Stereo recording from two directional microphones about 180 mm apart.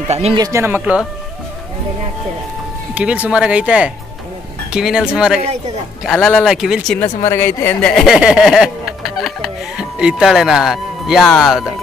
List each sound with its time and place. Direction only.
0.1 s speech: 35° right (ahead or behind)
0.4 s speech: 15° right (ahead or behind)
2.9 s speech: 5° right (ahead or behind)
7.0 s speech: 10° left (ahead or behind)